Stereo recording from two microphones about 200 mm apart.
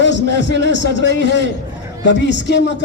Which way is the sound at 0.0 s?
60° left (ahead or behind).